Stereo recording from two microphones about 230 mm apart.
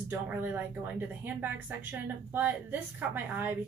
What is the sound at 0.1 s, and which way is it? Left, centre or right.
A woman's voice, centre.